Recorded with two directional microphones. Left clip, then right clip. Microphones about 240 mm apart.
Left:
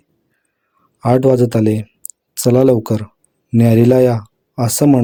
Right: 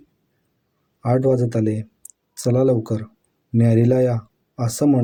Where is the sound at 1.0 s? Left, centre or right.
Left.